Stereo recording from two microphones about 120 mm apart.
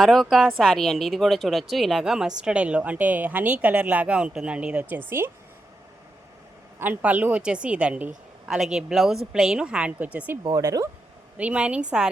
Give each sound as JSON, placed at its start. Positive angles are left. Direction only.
{"t": 0.0, "sound": "a woman's voice", "side_deg": 0}
{"t": 6.7, "sound": "a woman's voice", "side_deg": -15}
{"t": 10.4, "sound": "speech", "side_deg": -30}
{"t": 11.3, "sound": "a woman's voice", "side_deg": -10}